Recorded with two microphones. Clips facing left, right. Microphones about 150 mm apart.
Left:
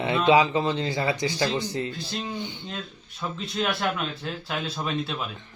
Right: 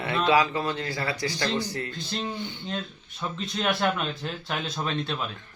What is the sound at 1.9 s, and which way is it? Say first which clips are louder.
Speech: left 1 dB; 5° left (ahead or behind).